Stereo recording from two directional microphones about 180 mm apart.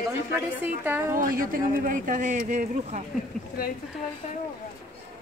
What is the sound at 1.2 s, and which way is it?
Speech, 50° right (ahead or behind).